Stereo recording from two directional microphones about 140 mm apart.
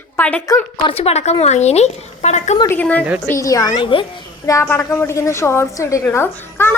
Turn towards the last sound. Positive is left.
turn(degrees=15)  # may be behind; listen again after turning